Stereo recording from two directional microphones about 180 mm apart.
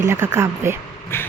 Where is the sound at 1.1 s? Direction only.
15° left (ahead or behind).